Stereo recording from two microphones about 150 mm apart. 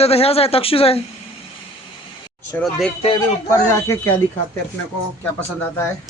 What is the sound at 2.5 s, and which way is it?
Speech, 5° left (ahead or behind).